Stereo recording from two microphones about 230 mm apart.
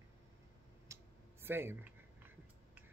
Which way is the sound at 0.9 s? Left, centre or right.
Centre.